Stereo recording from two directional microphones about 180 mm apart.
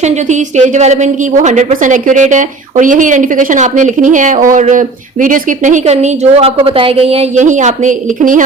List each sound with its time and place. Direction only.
0.0 s a woman's voice: 40° right (ahead or behind)